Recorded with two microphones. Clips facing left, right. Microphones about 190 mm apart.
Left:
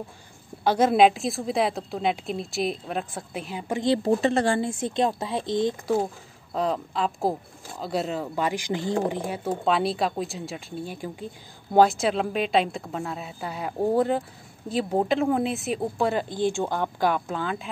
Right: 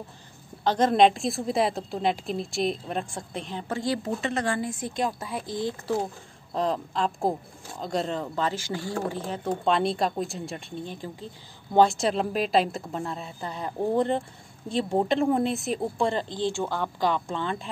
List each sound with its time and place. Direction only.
0.7 s a woman's voice: 10° left (ahead or behind)
4.0 s speech: 30° left (ahead or behind)
6.5 s a woman's voice: centre (ahead or behind)